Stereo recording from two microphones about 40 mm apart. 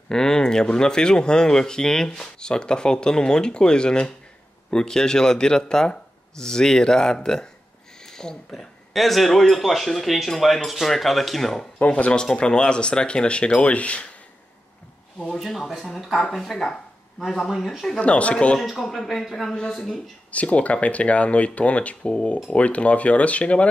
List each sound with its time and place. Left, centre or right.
0.1 s speech: centre
8.9 s speech: centre
11.9 s speech: left
15.2 s speech: centre
17.9 s speech: left
18.7 s speech: centre
20.2 s speech: left